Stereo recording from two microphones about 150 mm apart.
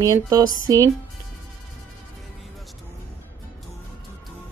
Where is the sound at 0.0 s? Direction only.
25° right (ahead or behind).